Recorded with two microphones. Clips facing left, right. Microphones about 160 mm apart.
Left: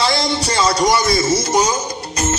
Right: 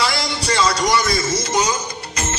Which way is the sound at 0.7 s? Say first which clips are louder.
Left 6 dB; 30° left (ahead or behind).